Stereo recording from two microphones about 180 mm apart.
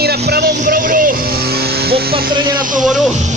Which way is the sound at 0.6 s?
50° right (ahead or behind).